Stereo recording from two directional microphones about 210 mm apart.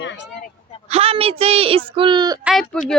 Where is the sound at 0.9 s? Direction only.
30° right (ahead or behind).